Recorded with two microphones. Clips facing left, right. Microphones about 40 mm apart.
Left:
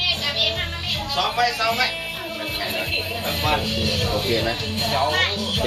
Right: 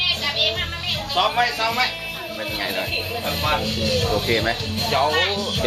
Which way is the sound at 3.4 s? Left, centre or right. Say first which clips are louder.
Even; centre.